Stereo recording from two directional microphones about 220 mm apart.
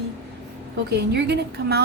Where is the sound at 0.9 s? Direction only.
45° right (ahead or behind).